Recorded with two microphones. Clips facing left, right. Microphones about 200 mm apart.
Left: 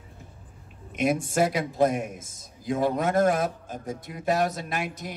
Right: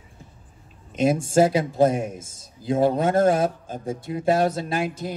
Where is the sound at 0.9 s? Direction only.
30° right (ahead or behind).